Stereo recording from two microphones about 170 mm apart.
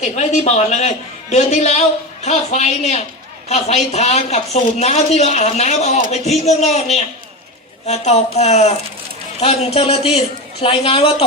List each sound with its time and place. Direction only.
0.0 s a man's voice: 40° left (ahead or behind)